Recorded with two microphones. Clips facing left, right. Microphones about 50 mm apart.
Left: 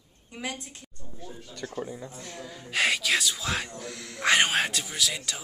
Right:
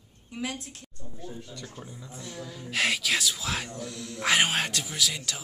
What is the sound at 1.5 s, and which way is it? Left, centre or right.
Speech, left.